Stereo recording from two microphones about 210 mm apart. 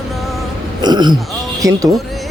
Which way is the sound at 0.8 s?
20° right (ahead or behind).